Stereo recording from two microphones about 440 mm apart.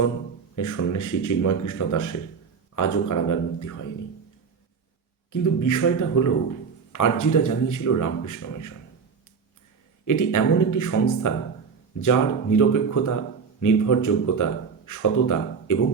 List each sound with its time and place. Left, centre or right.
0.5 s a man's voice: left
5.3 s a man's voice: left
10.1 s a man's voice: left